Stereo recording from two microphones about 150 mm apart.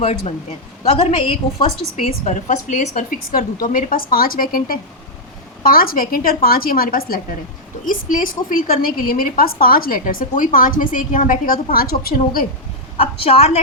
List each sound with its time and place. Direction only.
0.0 s a woman's voice: 45° left (ahead or behind); by 12.5 s 75° left (ahead or behind)
13.0 s a woman's voice: 40° left (ahead or behind)